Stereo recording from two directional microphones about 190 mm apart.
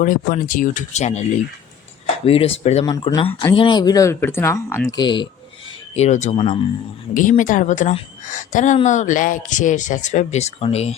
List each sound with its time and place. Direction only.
0.0 s speech: 45° left (ahead or behind)
2.8 s speech: 20° left (ahead or behind)
4.9 s speech: 25° left (ahead or behind)
5.9 s speech: 35° left (ahead or behind)
7.1 s speech: 45° left (ahead or behind)